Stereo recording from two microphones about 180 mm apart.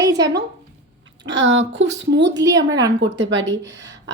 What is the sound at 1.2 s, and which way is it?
A woman's voice, 90° right.